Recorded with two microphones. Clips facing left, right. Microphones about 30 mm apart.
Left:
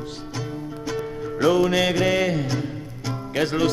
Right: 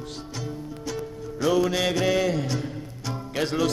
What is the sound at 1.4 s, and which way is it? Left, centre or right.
Mantra, centre.